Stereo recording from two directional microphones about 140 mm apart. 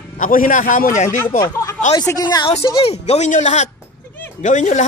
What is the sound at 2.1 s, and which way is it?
Speech, 30° left (ahead or behind).